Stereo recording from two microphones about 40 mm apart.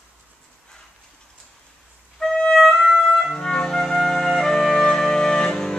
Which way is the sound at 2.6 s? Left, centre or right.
Centre.